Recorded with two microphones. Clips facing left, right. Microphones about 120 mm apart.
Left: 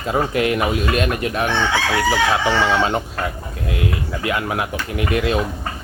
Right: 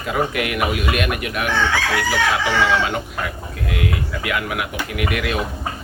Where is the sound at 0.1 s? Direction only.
30° left (ahead or behind).